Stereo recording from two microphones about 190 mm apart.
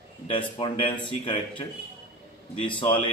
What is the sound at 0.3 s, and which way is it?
Speech, 25° left (ahead or behind).